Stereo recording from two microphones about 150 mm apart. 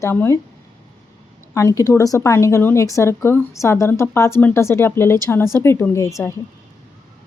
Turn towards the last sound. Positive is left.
turn(degrees=20)  # may be behind; listen again after turning